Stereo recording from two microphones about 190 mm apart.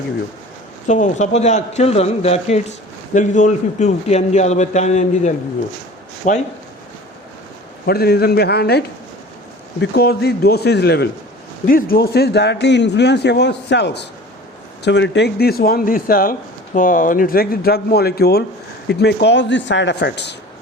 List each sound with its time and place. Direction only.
0.9 s a man's voice: 40° left (ahead or behind)
7.9 s a man's voice: 55° left (ahead or behind)
9.8 s a man's voice: 55° left (ahead or behind)
11.6 s a man's voice: 50° left (ahead or behind)